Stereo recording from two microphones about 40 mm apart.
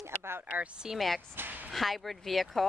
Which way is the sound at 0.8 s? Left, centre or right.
Centre.